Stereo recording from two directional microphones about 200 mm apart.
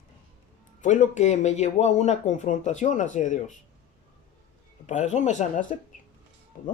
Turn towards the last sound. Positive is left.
turn(degrees=40)  # may be behind; listen again after turning